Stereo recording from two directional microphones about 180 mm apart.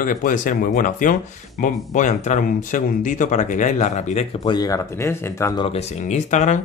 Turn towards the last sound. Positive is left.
turn(degrees=40)  # may be behind; listen again after turning